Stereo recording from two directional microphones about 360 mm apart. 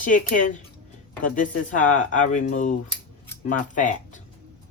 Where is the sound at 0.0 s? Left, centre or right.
Left.